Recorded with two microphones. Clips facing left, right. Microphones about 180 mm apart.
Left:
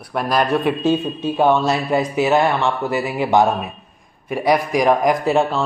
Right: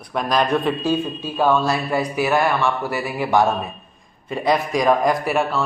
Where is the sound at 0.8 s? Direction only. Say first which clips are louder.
Left 3 dB; 20° left (ahead or behind).